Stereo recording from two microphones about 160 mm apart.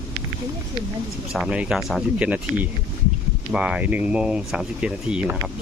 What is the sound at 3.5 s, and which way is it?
Speech, 5° right (ahead or behind).